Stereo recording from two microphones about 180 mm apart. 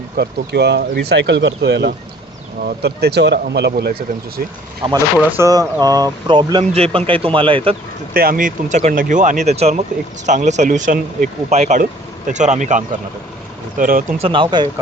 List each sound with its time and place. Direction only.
0.2 s speech: 65° right (ahead or behind)
2.6 s speech: 65° right (ahead or behind)
5.4 s speech: 20° right (ahead or behind)
8.1 s speech: 55° right (ahead or behind)
14.2 s speech: 30° right (ahead or behind)